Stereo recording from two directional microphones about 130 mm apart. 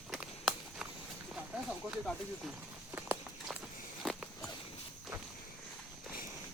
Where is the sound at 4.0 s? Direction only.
Centre (ahead or behind).